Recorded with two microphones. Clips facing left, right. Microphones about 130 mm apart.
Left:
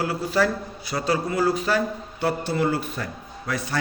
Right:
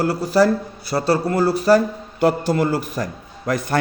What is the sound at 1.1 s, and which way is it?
Speech, 60° right (ahead or behind).